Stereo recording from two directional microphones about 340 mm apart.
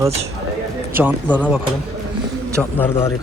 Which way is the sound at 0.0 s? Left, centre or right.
Centre.